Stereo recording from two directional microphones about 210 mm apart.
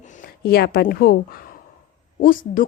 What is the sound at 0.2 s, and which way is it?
A woman's voice, 50° left (ahead or behind).